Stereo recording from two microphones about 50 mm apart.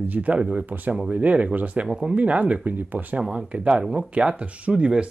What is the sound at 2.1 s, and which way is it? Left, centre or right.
Speech, right.